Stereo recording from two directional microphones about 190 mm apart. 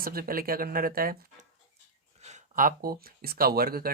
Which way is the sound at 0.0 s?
50° right (ahead or behind).